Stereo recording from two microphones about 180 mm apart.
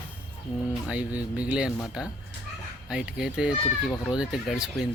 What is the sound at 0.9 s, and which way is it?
Speech, 5° right (ahead or behind).